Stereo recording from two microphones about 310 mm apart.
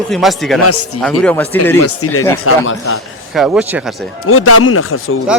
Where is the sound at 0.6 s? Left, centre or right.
Left.